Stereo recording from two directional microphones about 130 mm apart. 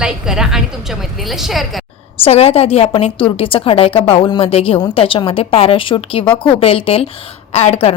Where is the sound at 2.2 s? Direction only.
50° left (ahead or behind).